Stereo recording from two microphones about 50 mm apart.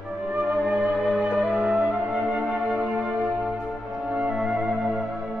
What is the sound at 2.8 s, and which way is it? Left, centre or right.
Music, centre.